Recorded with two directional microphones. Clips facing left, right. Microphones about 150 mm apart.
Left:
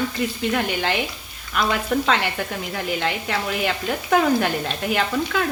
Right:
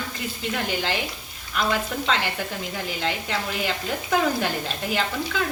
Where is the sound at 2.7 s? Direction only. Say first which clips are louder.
Left 4 dB; 65° left (ahead or behind).